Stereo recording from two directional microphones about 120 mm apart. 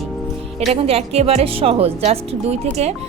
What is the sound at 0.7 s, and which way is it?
Speech, 55° right (ahead or behind).